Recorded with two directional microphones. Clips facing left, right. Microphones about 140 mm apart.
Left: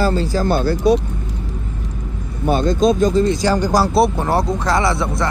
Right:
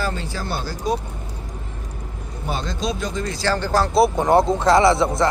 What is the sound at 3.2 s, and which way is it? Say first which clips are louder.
Speech: left 7 dB; 20° left (ahead or behind).